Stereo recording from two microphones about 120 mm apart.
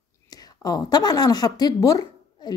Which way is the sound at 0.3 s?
30° left (ahead or behind).